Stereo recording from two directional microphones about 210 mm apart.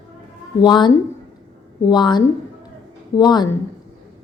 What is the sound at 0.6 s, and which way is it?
A woman's voice, 20° left (ahead or behind).